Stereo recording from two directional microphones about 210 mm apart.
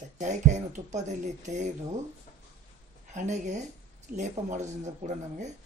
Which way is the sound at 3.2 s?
35° right (ahead or behind).